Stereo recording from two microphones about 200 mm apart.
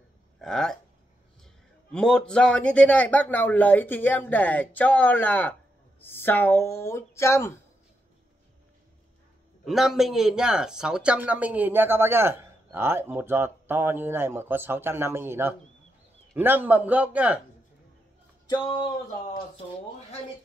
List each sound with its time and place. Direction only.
0.4 s a man's voice: 5° left (ahead or behind)
9.7 s speech: centre (ahead or behind)
18.5 s a sound: 25° left (ahead or behind)